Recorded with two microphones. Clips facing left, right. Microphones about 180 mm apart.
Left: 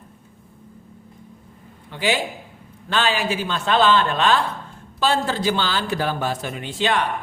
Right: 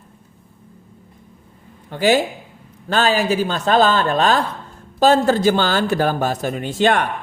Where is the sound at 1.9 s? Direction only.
45° right (ahead or behind).